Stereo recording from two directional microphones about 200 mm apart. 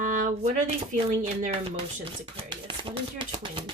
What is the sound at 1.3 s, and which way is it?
Speech, 35° right (ahead or behind).